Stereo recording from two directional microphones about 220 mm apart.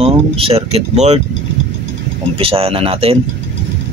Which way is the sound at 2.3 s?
25° right (ahead or behind).